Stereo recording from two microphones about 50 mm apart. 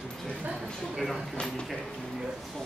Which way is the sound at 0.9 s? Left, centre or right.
Centre.